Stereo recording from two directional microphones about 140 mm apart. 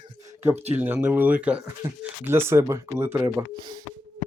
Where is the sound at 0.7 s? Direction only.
15° right (ahead or behind).